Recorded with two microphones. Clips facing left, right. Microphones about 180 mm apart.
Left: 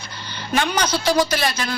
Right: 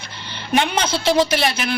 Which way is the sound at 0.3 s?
25° right (ahead or behind).